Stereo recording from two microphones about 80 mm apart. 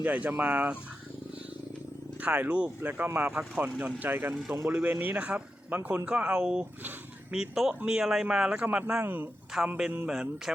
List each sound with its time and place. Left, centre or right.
0.0 s speech: right
2.2 s speech: right
8.8 s speech: right
9.5 s speech: centre